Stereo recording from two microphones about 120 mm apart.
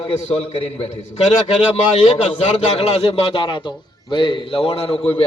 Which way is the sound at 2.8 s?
55° left (ahead or behind).